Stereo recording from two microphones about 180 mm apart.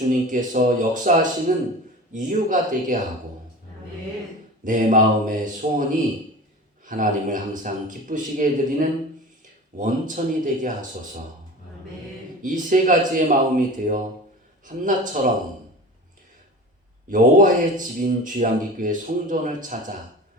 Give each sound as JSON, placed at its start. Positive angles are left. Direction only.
{"t": 0.1, "sound": "a man's voice", "side_deg": -45}
{"t": 4.6, "sound": "a man's voice", "side_deg": -45}
{"t": 6.8, "sound": "a man's voice", "side_deg": -45}
{"t": 12.4, "sound": "a man's voice", "side_deg": -45}
{"t": 17.1, "sound": "a man's voice", "side_deg": -45}